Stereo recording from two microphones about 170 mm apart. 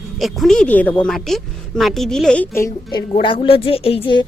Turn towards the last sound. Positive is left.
turn(degrees=30)  # may be behind; listen again after turning